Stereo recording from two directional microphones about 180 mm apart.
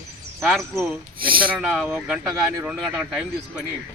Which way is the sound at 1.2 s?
55° right (ahead or behind).